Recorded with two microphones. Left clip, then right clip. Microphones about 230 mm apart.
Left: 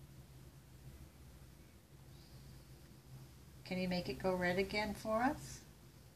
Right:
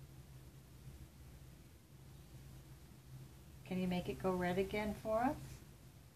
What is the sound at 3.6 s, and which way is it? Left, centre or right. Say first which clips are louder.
Speech: left 2 dB; centre.